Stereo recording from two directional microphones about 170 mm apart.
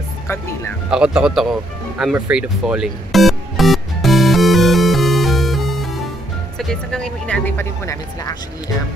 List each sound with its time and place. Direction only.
0.3 s speech: 15° left (ahead or behind)
0.8 s music: 5° right (ahead or behind)
6.6 s speech: 5° left (ahead or behind)